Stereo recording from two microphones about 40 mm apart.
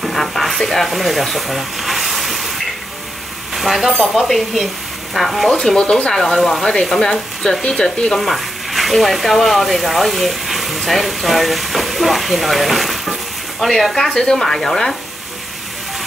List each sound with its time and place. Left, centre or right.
0.0 s sizzle: centre
0.8 s a sound: centre
3.5 s speech: centre
5.5 s speech: centre
8.2 s speech: centre
13.9 s speech: centre